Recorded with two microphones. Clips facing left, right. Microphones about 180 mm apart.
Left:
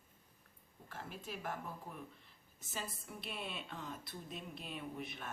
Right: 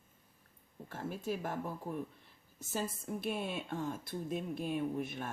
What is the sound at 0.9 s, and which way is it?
Speech, 45° right (ahead or behind).